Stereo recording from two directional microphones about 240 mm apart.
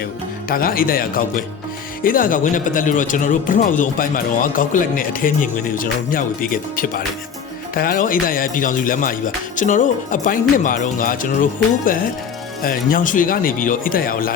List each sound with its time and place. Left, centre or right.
0.4 s a man's voice: left
12.6 s a man's voice: left